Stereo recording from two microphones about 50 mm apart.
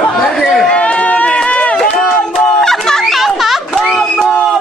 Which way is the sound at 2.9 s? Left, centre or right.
Centre.